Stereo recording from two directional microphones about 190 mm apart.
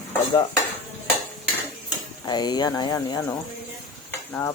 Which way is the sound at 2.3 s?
20° left (ahead or behind).